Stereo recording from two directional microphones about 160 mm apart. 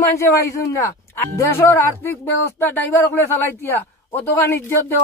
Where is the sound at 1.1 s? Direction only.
15° left (ahead or behind).